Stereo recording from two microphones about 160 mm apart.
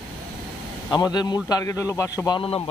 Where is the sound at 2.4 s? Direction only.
35° left (ahead or behind).